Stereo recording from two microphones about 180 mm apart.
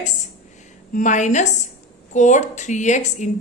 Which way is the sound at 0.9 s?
45° left (ahead or behind).